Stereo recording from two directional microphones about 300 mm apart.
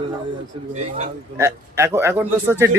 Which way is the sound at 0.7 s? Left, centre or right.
Right.